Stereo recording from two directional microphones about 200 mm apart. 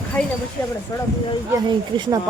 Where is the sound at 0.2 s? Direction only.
5° left (ahead or behind).